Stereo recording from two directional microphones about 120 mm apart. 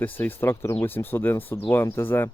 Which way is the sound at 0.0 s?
15° left (ahead or behind).